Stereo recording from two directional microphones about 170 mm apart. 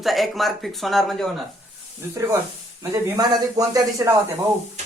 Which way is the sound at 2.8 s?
20° right (ahead or behind).